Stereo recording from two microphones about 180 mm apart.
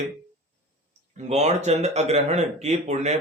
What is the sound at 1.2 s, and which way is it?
Speech, 40° right (ahead or behind).